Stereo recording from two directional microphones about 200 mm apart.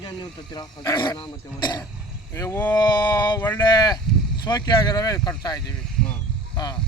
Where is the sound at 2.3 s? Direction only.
15° left (ahead or behind).